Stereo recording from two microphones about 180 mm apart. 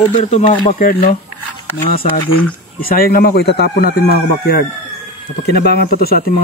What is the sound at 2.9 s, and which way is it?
Speech, 55° left (ahead or behind).